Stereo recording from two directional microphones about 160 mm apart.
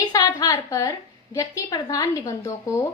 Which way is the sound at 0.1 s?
20° left (ahead or behind).